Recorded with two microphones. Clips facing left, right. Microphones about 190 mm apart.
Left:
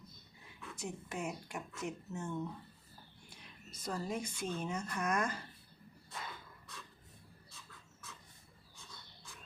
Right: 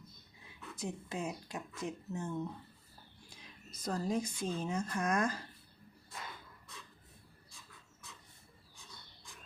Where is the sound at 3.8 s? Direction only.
35° right (ahead or behind).